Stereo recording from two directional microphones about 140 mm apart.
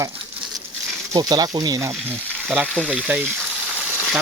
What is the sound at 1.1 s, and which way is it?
Speech, 25° right (ahead or behind).